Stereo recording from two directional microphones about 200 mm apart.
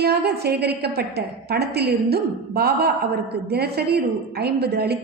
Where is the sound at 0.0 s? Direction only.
55° right (ahead or behind).